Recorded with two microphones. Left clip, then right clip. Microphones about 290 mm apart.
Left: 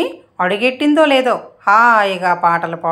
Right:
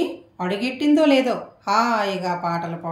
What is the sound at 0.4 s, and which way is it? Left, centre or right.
A woman's voice, left.